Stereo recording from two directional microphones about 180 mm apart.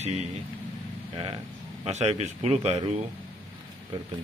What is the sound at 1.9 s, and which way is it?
Speech, 35° right (ahead or behind).